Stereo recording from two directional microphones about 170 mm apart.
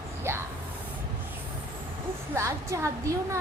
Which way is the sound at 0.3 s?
15° right (ahead or behind).